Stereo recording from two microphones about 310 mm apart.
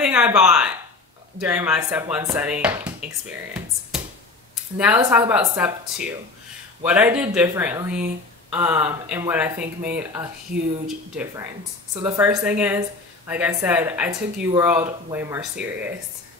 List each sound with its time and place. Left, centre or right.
0.0 s speech: centre
11.1 s speech: centre